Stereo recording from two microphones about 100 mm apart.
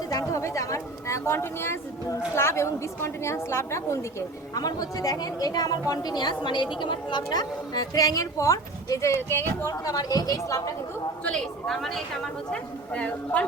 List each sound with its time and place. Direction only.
0.1 s speech: 35° left (ahead or behind)
4.5 s a woman's voice: 40° left (ahead or behind); by 9.7 s 25° left (ahead or behind)
9.7 s a woman's voice: 40° left (ahead or behind)
11.2 s a woman's voice: 5° left (ahead or behind)
12.5 s a woman's voice: 10° left (ahead or behind)